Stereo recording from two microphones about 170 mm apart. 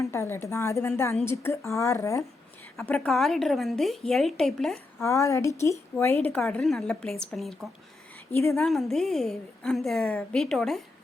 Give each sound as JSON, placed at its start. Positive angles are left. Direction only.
{"t": 0.0, "sound": "speech", "side_deg": 15}
{"t": 2.7, "sound": "a woman's voice", "side_deg": 5}
{"t": 4.9, "sound": "a woman's voice", "side_deg": 15}
{"t": 8.3, "sound": "a woman's voice", "side_deg": 15}
{"t": 8.5, "sound": "a woman's voice", "side_deg": 0}